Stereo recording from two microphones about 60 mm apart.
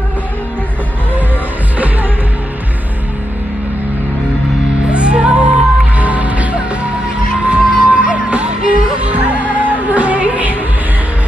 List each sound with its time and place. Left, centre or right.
4.9 s music: centre